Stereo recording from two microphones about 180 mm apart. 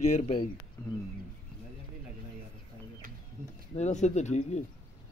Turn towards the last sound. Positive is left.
turn(degrees=40)  # may be behind; listen again after turning